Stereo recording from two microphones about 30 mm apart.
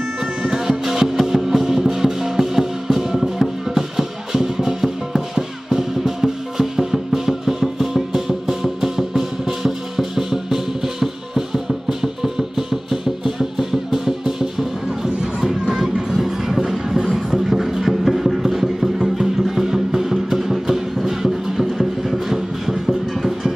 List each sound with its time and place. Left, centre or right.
0.5 s music: centre
17.3 s a sound: centre
18.9 s music: centre